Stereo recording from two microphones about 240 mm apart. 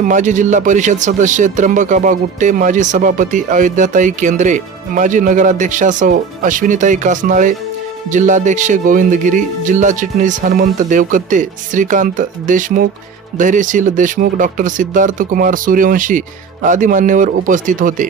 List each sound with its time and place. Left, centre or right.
0.1 s speech: right